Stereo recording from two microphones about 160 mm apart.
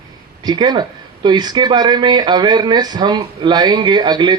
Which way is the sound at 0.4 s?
25° right (ahead or behind).